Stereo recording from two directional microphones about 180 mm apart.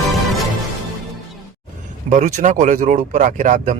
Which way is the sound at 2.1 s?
40° right (ahead or behind).